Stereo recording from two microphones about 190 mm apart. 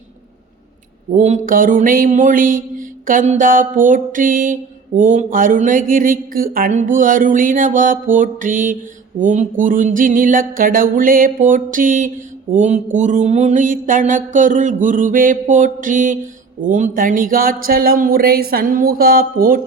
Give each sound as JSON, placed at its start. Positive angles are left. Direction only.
{"t": 1.1, "sound": "mantra", "side_deg": -40}